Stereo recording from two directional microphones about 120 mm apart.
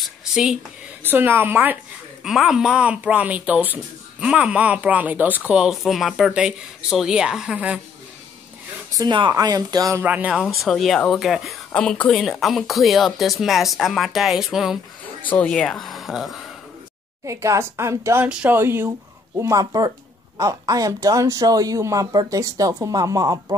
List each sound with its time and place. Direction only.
0.0 s a sound: 5° right (ahead or behind)
1.0 s speech: 15° right (ahead or behind)
2.2 s speech: 5° right (ahead or behind)
8.9 s speech: 40° right (ahead or behind)
10.0 s speech: 10° right (ahead or behind)
10.4 s speech: centre (ahead or behind)
15.2 s speech: 10° left (ahead or behind)
17.2 s speech: 25° right (ahead or behind)
18.2 s speech: 10° right (ahead or behind); by 23.4 s 30° right (ahead or behind)